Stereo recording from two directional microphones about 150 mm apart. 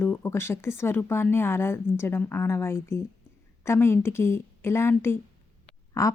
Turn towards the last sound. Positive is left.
turn(degrees=20)  # may be behind; listen again after turning